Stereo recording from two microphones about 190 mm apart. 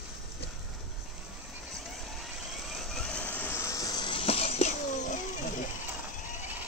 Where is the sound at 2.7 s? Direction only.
5° left (ahead or behind); by 5.2 s 40° left (ahead or behind).